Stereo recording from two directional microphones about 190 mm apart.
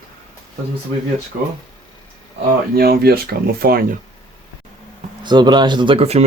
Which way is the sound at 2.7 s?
55° right (ahead or behind).